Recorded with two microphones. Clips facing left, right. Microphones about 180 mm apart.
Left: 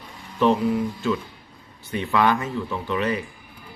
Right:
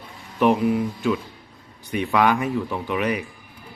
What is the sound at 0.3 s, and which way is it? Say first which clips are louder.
Speech: right 1 dB; 15° right (ahead or behind).